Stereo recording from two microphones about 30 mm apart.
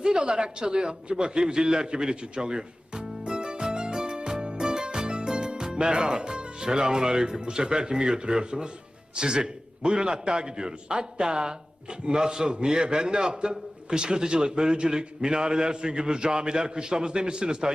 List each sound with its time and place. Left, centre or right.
0.0 s speech: right
1.1 s a sound: right
7.5 s a man's voice: right